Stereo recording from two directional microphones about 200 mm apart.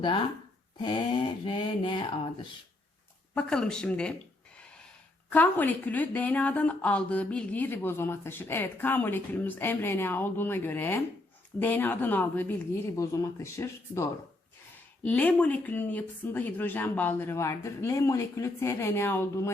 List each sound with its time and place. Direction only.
0.8 s speech: 25° left (ahead or behind)
3.3 s speech: 5° left (ahead or behind)
5.3 s a woman's voice: 10° left (ahead or behind)